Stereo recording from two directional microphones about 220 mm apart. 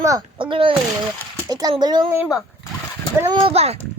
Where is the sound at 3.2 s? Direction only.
20° right (ahead or behind).